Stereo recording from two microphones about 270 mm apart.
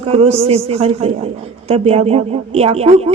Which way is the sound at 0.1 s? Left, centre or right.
Right.